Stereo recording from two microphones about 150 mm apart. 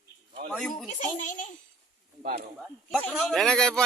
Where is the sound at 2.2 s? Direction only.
80° right.